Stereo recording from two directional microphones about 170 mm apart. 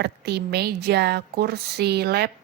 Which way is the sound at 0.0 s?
75° right (ahead or behind).